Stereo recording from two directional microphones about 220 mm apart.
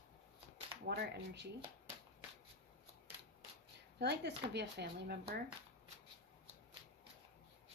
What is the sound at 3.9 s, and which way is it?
Speech, 50° right (ahead or behind).